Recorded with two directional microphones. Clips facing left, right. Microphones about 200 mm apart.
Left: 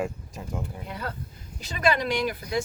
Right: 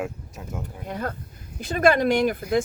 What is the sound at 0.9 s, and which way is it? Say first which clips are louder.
Speech: right 9 dB; 50° right (ahead or behind).